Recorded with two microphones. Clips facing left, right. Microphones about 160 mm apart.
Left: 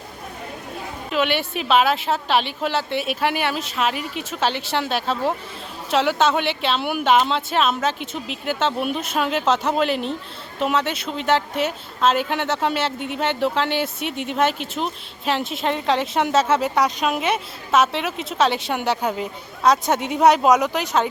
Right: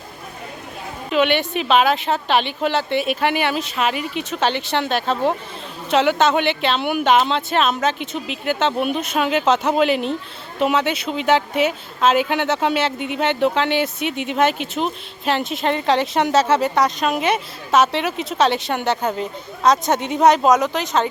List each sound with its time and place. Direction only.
1.1 s speech: 5° left (ahead or behind)